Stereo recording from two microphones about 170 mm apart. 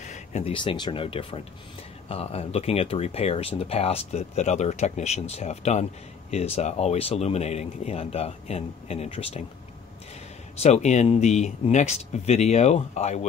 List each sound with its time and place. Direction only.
0.0 s speech: 40° left (ahead or behind)
10.6 s speech: 40° left (ahead or behind)